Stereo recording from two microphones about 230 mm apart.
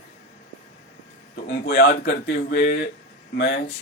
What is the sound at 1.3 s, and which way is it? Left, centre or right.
Speech, left.